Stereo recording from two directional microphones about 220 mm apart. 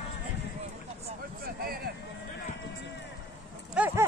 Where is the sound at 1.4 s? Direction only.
45° right (ahead or behind).